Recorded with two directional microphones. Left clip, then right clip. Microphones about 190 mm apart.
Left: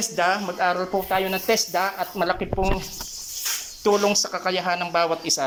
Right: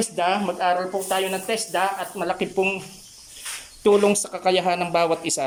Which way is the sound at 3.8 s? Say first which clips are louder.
Right 2 dB; 20° right (ahead or behind).